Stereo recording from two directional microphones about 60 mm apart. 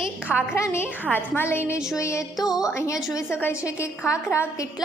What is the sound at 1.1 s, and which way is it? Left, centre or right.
A woman's voice, left.